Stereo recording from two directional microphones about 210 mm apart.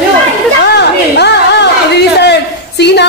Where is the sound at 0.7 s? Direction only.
55° left (ahead or behind).